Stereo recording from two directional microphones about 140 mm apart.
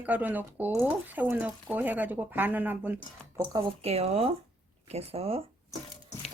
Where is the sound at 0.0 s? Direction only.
10° right (ahead or behind).